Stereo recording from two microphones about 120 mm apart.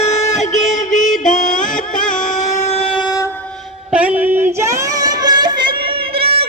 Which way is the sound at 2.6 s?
55° left (ahead or behind).